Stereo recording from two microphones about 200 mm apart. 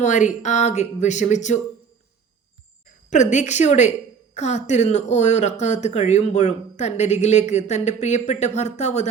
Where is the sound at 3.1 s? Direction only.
35° left (ahead or behind).